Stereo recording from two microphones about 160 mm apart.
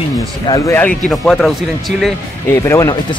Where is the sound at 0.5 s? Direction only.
15° left (ahead or behind).